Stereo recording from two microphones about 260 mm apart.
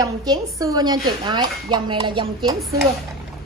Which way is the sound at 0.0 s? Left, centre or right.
Centre.